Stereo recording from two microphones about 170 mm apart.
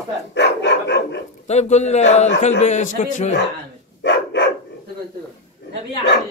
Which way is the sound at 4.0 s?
90° left.